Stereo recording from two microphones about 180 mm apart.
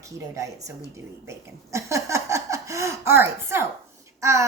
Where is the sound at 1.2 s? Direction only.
15° right (ahead or behind).